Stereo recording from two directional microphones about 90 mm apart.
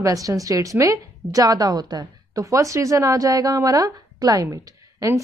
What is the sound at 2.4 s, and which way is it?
A woman's voice, 35° right (ahead or behind).